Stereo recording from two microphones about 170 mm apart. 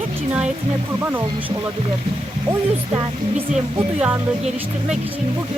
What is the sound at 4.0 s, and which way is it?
Speech, 5° right (ahead or behind).